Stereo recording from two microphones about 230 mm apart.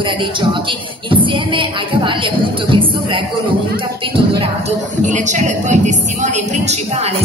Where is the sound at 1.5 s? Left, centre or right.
Right.